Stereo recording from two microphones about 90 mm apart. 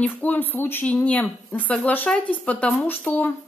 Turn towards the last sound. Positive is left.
turn(degrees=20)  # may be behind; listen again after turning